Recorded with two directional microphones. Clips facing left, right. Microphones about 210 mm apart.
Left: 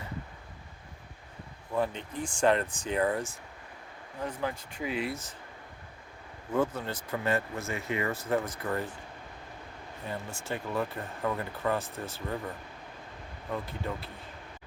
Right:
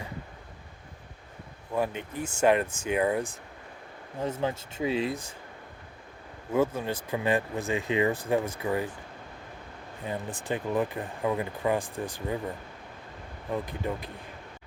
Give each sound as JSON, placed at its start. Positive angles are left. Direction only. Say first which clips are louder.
{"t": 1.7, "sound": "speech", "louder": "right 1 dB", "side_deg": -10}
{"t": 4.2, "sound": "speech", "louder": "right 4 dB", "side_deg": -25}
{"t": 6.5, "sound": "speech", "louder": "right 3 dB", "side_deg": -10}
{"t": 10.1, "sound": "speech", "louder": "right 4 dB", "side_deg": -15}
{"t": 13.5, "sound": "speech", "louder": "right 4 dB", "side_deg": -15}